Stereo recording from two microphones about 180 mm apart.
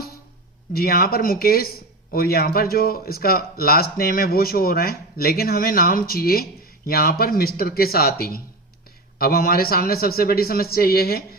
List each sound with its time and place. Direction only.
0.7 s speech: 55° left (ahead or behind)